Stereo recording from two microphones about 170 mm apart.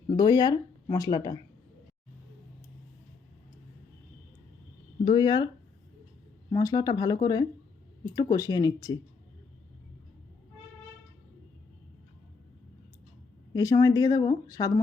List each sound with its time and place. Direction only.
0.2 s speech: 25° left (ahead or behind)
5.0 s speech: 25° left (ahead or behind)
6.5 s speech: 20° left (ahead or behind)
13.5 s speech: 20° left (ahead or behind)